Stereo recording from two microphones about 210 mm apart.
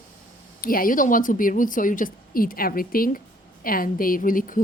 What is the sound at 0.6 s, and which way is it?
A woman's voice, 40° left (ahead or behind).